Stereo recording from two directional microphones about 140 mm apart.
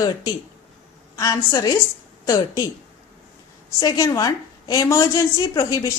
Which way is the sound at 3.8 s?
25° left (ahead or behind).